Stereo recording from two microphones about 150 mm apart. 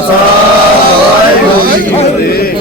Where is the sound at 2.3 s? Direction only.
90° left.